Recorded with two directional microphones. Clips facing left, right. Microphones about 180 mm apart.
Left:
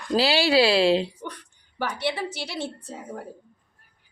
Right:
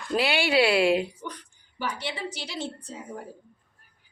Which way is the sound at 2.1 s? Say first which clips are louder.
Left 6 dB; 60° left (ahead or behind).